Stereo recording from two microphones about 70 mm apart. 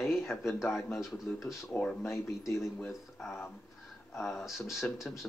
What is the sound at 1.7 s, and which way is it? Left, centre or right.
Speech, centre.